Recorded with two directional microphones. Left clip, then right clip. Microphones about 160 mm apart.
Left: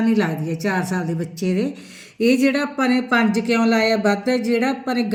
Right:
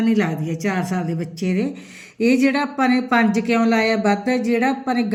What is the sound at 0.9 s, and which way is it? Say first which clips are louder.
Speech: even; 25° right (ahead or behind).